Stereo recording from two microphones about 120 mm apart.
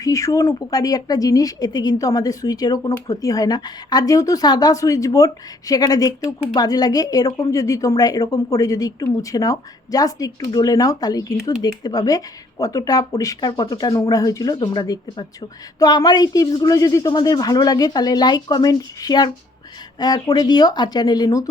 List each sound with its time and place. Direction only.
0.0 s speech: 30° left (ahead or behind)